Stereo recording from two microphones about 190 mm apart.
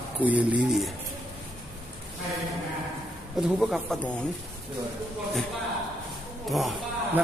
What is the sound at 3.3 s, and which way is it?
Speech, centre (ahead or behind).